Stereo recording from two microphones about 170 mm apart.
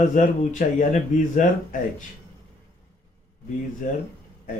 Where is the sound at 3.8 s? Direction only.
50° left (ahead or behind).